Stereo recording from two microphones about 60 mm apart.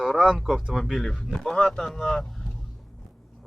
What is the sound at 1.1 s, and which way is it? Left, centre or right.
Speech, centre.